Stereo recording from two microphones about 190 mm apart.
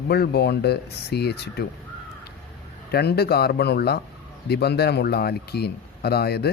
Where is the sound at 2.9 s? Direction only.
55° left (ahead or behind).